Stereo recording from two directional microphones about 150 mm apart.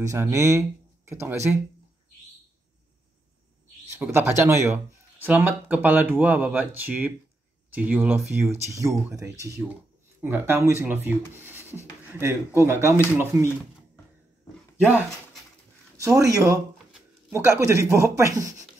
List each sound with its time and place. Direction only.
0.0 s speech: 20° right (ahead or behind)
3.9 s speech: 15° right (ahead or behind)
16.0 s speech: 20° right (ahead or behind)